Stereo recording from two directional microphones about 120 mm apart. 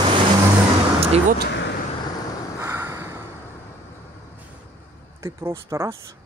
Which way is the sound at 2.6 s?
20° right (ahead or behind).